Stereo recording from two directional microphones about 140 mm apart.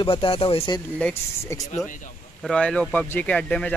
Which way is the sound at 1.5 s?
20° left (ahead or behind).